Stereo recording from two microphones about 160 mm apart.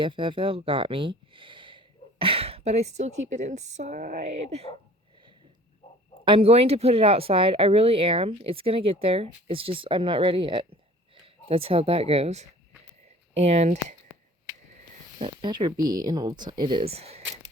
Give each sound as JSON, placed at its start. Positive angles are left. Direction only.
{"t": 0.0, "sound": "speech", "side_deg": -30}
{"t": 6.2, "sound": "speech", "side_deg": -35}
{"t": 15.2, "sound": "speech", "side_deg": -30}